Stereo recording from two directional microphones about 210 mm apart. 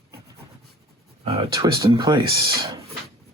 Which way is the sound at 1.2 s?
25° right (ahead or behind).